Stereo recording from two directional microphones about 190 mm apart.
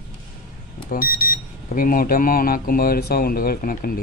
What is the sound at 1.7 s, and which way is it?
Speech, 45° left (ahead or behind).